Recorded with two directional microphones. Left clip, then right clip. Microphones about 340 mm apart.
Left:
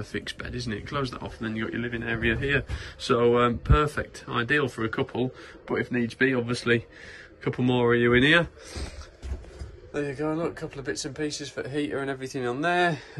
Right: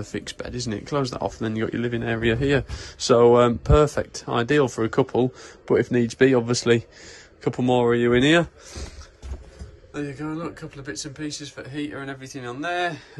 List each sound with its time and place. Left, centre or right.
0.1 s speech: centre
9.9 s speech: centre